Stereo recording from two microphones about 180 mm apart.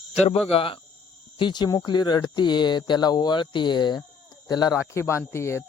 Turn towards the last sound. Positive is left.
turn(degrees=15)  # may be behind; listen again after turning